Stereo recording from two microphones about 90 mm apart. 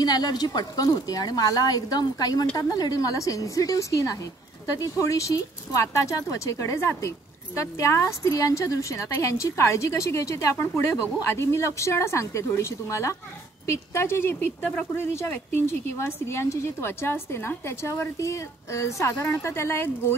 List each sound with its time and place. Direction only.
0.0 s a woman's voice: 50° left (ahead or behind); by 20.2 s 25° left (ahead or behind)